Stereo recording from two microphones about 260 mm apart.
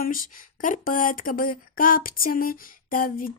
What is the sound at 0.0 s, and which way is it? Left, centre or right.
Speech, left.